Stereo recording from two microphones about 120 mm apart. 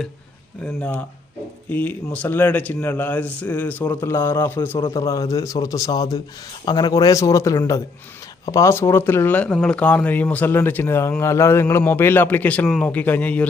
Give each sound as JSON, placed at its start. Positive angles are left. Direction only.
{"t": 0.6, "sound": "a man's voice", "side_deg": 10}